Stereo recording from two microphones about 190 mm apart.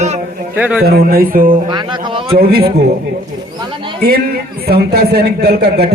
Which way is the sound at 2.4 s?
55° right (ahead or behind).